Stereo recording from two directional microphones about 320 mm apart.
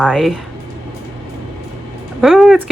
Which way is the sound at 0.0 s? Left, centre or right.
Centre.